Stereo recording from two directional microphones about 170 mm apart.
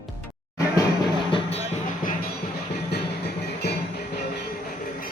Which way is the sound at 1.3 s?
35° left (ahead or behind).